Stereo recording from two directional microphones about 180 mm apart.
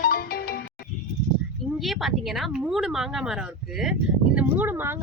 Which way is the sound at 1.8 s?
Centre (ahead or behind).